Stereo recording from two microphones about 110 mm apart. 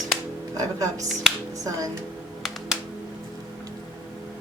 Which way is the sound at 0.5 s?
30° right (ahead or behind).